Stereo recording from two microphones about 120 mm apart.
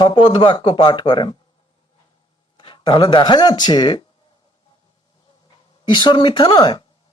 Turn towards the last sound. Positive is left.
turn(degrees=40)  # may be behind; listen again after turning